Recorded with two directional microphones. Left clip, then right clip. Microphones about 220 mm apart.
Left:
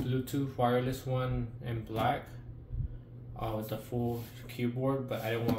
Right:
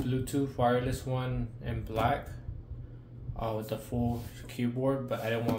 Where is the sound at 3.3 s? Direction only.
30° right (ahead or behind).